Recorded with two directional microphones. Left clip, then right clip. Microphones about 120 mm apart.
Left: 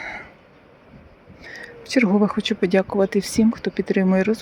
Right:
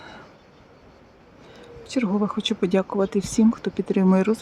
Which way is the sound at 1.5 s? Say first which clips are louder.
Left 6 dB; 5° left (ahead or behind).